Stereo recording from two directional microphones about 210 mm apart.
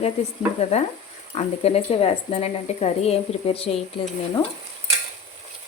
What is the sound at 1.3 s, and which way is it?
Speech, 30° left (ahead or behind).